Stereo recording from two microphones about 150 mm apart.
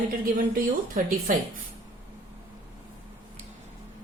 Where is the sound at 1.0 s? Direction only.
70° right (ahead or behind).